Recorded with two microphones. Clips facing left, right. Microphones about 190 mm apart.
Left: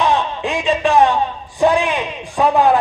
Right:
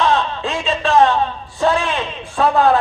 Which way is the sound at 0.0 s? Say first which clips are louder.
Even; 15° left (ahead or behind).